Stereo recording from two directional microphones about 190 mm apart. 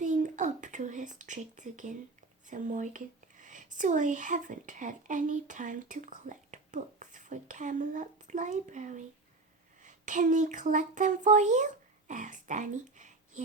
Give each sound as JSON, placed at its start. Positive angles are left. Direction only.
{"t": 0.0, "sound": "speech", "side_deg": -40}